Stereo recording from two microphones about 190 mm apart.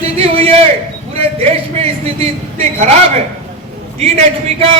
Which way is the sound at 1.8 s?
35° right (ahead or behind).